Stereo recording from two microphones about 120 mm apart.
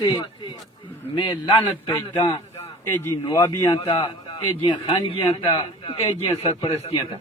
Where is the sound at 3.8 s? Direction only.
45° left (ahead or behind).